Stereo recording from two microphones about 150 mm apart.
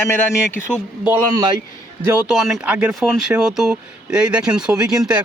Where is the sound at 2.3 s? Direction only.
5° right (ahead or behind).